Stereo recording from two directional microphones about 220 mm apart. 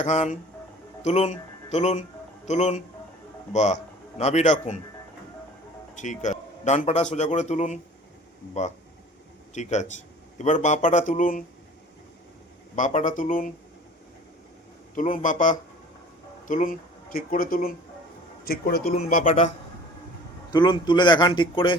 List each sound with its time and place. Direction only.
0.0 s speech: 35° left (ahead or behind)
5.9 s speech: 35° left (ahead or behind)
9.6 s speech: 30° left (ahead or behind)
12.7 s speech: 35° left (ahead or behind)
14.9 s speech: 35° left (ahead or behind)
20.5 s speech: 20° left (ahead or behind)